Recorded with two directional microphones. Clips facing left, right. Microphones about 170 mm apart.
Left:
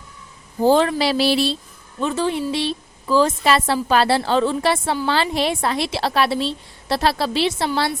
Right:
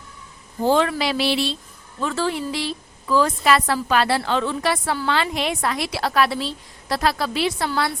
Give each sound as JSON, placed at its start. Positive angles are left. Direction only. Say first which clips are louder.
{"t": 0.6, "sound": "a woman's voice", "louder": "left 3 dB", "side_deg": 35}
{"t": 2.0, "sound": "a woman's voice", "louder": "left 3 dB", "side_deg": 20}